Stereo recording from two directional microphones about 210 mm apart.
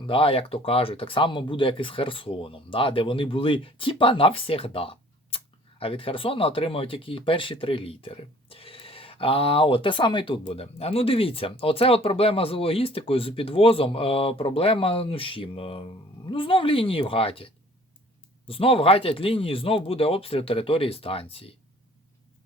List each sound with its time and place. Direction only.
0.0 s speech: 25° left (ahead or behind)